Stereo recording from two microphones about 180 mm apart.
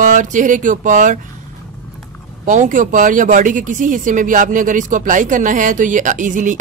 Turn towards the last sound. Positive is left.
turn(degrees=-45)  # may be behind; listen again after turning